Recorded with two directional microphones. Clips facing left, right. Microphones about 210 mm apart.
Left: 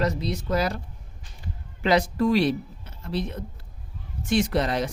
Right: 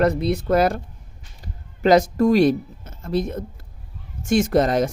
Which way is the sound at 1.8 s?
45° right (ahead or behind).